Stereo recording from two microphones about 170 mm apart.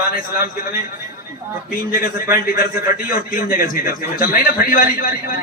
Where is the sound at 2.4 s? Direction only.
60° left (ahead or behind).